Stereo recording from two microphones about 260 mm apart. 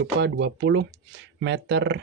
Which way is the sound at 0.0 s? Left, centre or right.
Right.